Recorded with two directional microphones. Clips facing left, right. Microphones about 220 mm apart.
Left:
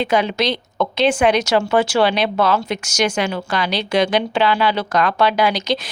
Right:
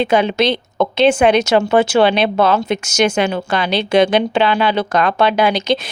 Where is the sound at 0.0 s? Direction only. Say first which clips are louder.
Right 4 dB; 25° right (ahead or behind).